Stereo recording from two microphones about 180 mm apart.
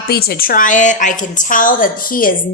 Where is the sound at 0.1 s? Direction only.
60° left (ahead or behind).